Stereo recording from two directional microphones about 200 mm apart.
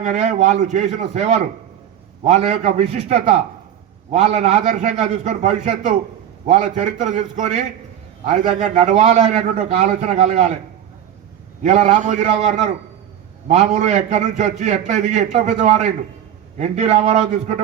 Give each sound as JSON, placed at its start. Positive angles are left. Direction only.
{"t": 0.0, "sound": "a man's voice", "side_deg": -35}
{"t": 11.6, "sound": "a man's voice", "side_deg": -35}